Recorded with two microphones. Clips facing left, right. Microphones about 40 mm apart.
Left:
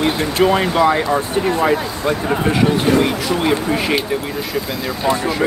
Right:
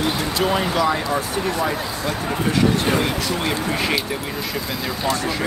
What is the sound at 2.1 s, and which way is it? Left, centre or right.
Speech, left.